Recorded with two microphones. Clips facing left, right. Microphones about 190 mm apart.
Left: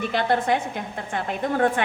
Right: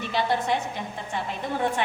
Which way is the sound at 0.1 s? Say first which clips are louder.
Left 2 dB; 55° left (ahead or behind).